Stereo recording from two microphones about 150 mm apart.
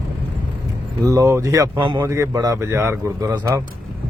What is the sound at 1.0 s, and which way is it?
A man's voice, 20° right (ahead or behind).